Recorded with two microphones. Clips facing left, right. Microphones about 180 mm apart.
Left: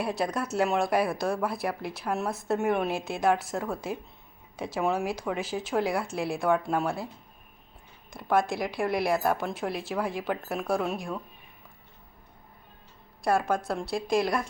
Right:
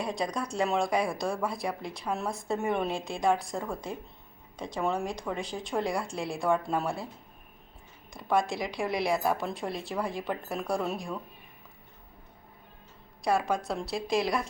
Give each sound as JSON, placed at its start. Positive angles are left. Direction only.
{"t": 0.0, "sound": "speech", "side_deg": 5}
{"t": 8.1, "sound": "speech", "side_deg": 0}
{"t": 13.2, "sound": "speech", "side_deg": 0}